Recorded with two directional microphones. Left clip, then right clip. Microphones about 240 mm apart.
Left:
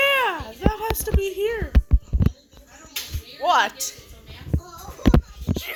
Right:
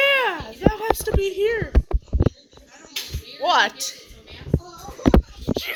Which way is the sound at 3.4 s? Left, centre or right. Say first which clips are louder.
Right 1 dB; centre.